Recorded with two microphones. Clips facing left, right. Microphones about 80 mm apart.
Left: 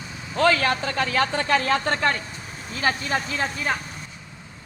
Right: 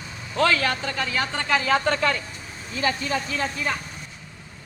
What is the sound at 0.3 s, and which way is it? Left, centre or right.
Speech, left.